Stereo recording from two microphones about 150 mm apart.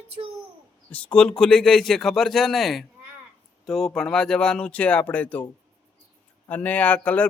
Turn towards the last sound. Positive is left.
turn(degrees=10)  # may be behind; listen again after turning